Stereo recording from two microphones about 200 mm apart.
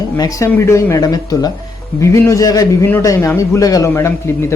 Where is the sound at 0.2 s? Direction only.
15° left (ahead or behind).